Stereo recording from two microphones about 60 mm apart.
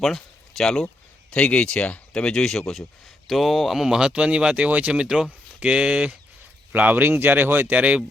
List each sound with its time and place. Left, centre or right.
0.0 s speech: centre
1.3 s speech: left; by 6.1 s centre
6.7 s speech: right
7.8 s speech: right